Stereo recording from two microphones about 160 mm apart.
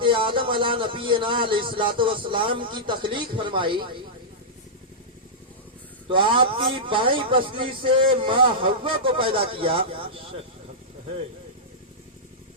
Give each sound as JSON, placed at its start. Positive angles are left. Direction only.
{"t": 0.0, "sound": "speech", "side_deg": -30}
{"t": 6.1, "sound": "speech", "side_deg": -30}